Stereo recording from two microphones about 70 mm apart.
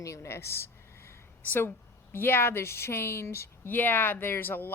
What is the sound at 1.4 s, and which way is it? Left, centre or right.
A woman's voice, left.